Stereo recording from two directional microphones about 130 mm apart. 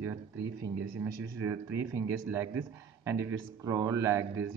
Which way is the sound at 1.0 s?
25° right (ahead or behind).